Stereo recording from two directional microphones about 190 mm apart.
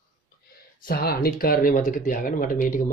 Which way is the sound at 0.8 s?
50° left (ahead or behind).